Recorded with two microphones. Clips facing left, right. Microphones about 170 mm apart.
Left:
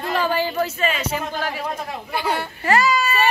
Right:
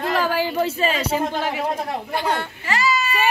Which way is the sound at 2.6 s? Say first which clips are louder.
Left 4 dB; 50° left (ahead or behind).